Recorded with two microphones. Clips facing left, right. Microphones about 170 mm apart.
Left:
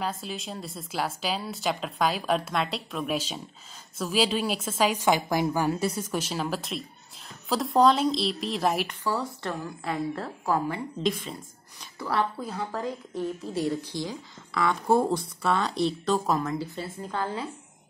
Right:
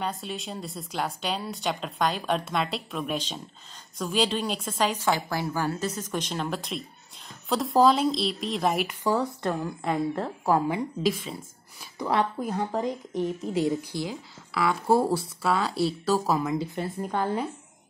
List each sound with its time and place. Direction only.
0.0 s a woman's voice: centre (ahead or behind)
9.0 s a woman's voice: 20° right (ahead or behind)
11.0 s speech: 5° right (ahead or behind)
12.0 s speech: 15° right (ahead or behind)
17.0 s speech: 15° right (ahead or behind)